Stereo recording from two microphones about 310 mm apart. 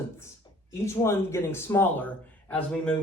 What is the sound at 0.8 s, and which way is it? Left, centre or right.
Speech, centre.